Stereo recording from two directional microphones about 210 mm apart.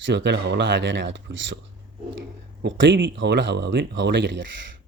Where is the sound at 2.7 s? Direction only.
60° right (ahead or behind).